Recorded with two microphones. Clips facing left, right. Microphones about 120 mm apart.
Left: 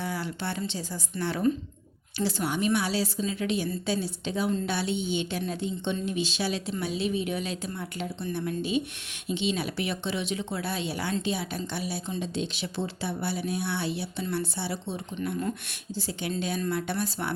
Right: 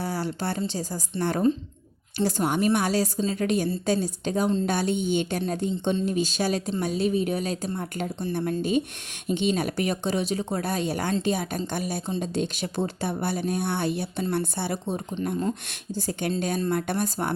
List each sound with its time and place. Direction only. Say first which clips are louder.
0.0 s a woman's voice: right 4 dB; 40° right (ahead or behind)